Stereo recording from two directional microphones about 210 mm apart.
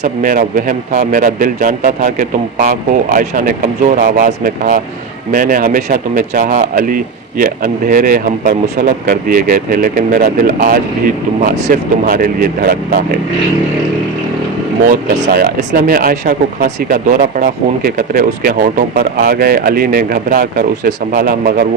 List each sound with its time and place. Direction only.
0.0 s a man's voice: 40° right (ahead or behind)
14.8 s speech: 45° right (ahead or behind)